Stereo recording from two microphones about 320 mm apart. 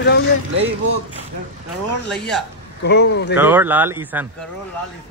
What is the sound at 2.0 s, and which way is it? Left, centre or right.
Speech, centre.